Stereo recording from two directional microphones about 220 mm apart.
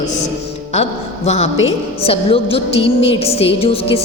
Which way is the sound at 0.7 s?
30° left (ahead or behind).